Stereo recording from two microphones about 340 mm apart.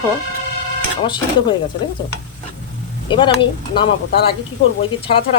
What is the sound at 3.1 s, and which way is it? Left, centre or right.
Speech, centre.